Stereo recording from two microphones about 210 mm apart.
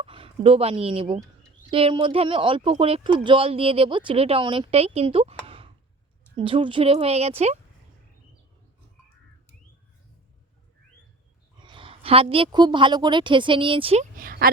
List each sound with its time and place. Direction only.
0.0 s speech: 25° right (ahead or behind)
11.6 s a woman's voice: 25° right (ahead or behind); by 14.5 s 45° right (ahead or behind)